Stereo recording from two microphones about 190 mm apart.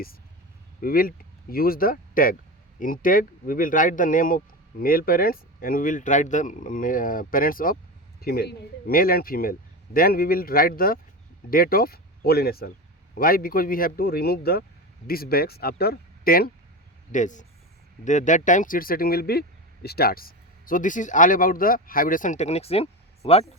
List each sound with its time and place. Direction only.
0.8 s speech: 50° left (ahead or behind)
17.1 s speech: 40° left (ahead or behind)